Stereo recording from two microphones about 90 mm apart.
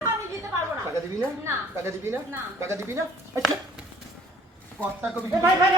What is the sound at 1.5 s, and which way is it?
A woman's voice, 30° right (ahead or behind).